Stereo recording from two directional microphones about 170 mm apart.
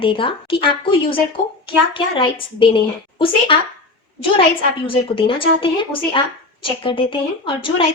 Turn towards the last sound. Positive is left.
turn(degrees=30)  # may be behind; listen again after turning